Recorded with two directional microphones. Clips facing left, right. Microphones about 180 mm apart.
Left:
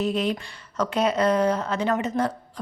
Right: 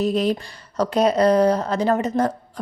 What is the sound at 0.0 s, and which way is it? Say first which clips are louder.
Speech: right 4 dB; 40° right (ahead or behind).